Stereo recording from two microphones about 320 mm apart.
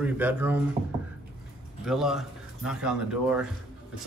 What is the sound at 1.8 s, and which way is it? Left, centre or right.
A man's voice, centre.